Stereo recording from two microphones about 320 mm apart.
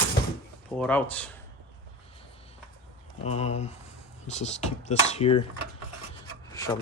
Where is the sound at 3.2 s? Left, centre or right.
Centre.